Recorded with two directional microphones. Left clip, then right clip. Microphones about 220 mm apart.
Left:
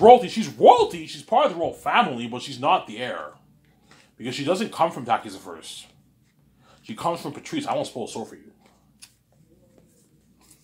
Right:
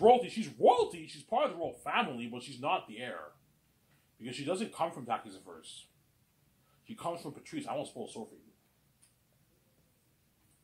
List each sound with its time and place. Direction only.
0.0 s speech: 20° left (ahead or behind)
6.8 s speech: 25° left (ahead or behind)